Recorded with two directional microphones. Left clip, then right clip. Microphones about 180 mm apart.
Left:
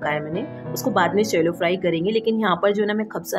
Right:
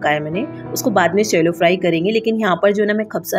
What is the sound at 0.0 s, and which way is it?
A woman's voice, 20° right (ahead or behind).